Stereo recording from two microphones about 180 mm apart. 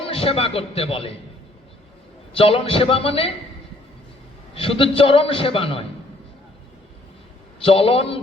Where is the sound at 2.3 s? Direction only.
30° left (ahead or behind).